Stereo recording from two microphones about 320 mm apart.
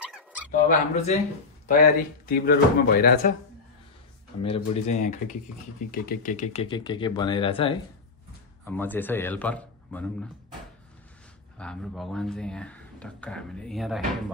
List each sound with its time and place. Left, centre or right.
0.5 s speech: left
2.2 s speech: left
4.4 s speech: centre
8.6 s speech: centre
11.5 s speech: centre